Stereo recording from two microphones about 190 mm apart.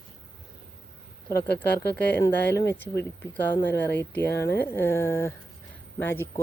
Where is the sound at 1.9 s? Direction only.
10° left (ahead or behind).